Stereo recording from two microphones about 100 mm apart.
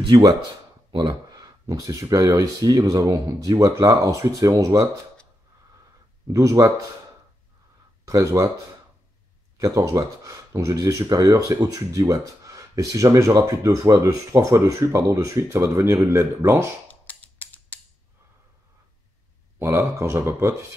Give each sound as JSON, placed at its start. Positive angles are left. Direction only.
{"t": 0.0, "sound": "speech", "side_deg": -40}
{"t": 6.2, "sound": "speech", "side_deg": -35}
{"t": 8.0, "sound": "speech", "side_deg": -35}
{"t": 9.6, "sound": "speech", "side_deg": -35}
{"t": 16.8, "sound": "a sound", "side_deg": 15}
{"t": 19.6, "sound": "speech", "side_deg": -30}